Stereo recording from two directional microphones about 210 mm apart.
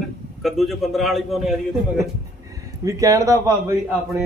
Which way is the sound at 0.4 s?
Centre (ahead or behind).